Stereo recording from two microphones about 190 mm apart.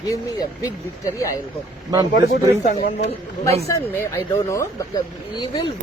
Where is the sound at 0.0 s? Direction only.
20° left (ahead or behind).